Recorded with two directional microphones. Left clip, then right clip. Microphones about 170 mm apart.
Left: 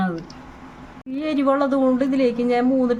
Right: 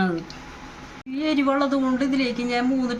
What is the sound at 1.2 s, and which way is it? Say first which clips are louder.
A woman's voice: left 2 dB; 30° left (ahead or behind).